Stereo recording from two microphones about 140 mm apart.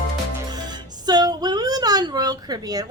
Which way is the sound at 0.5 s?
30° right (ahead or behind).